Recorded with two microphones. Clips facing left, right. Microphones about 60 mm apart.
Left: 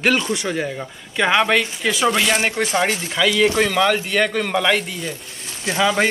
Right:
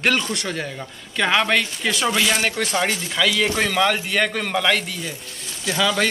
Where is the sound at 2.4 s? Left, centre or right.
Left.